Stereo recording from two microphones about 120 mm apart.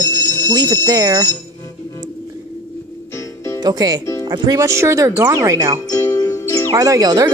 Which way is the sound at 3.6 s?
35° right (ahead or behind).